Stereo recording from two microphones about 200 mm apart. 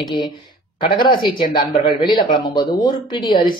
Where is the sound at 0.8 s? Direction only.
25° left (ahead or behind).